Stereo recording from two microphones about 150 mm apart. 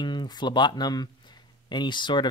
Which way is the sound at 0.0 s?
30° left (ahead or behind).